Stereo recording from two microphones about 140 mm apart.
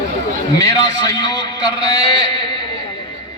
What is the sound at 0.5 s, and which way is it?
A man's voice, 25° left (ahead or behind).